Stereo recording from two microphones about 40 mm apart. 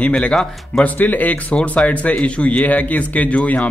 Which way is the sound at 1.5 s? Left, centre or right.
Left.